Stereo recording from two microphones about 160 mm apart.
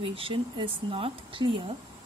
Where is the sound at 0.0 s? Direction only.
35° right (ahead or behind).